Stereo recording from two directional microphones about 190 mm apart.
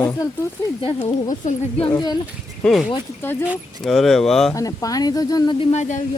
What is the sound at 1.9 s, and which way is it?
Speech, 20° left (ahead or behind).